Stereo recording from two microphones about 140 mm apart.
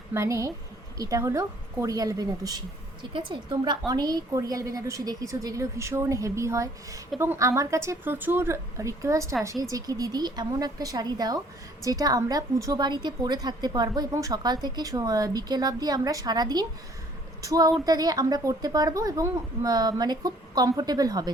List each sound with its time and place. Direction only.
0.1 s a woman's voice: 20° right (ahead or behind)